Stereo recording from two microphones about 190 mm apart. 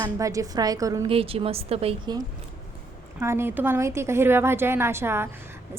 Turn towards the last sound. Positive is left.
turn(degrees=-10)  # may be behind; listen again after turning